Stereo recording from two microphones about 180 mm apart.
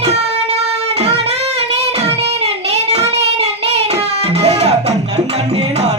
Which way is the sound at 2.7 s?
35° right (ahead or behind).